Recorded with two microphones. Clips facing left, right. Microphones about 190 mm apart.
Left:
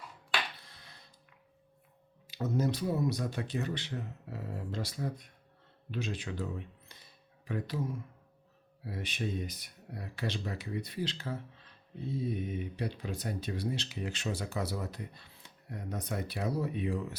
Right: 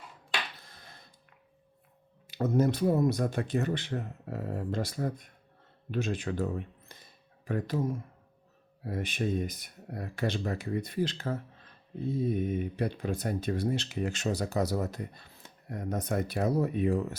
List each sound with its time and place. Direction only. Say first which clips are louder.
0.6 s music: right 3 dB; 45° right (ahead or behind)
2.2 s speech: right 5 dB; 55° right (ahead or behind)